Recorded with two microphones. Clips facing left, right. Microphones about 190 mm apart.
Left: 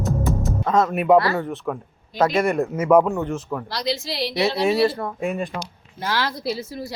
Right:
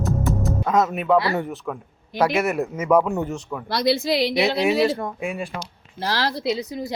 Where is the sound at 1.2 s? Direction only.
15° right (ahead or behind).